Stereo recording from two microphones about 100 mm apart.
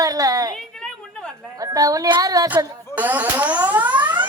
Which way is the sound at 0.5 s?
10° left (ahead or behind).